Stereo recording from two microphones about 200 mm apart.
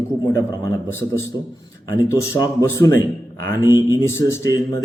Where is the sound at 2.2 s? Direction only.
15° left (ahead or behind).